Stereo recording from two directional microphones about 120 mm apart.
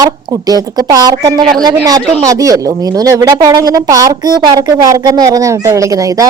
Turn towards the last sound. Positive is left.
turn(degrees=-30)  # may be behind; listen again after turning